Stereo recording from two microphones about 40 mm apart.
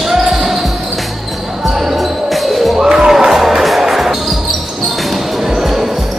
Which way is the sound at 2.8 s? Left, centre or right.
Centre.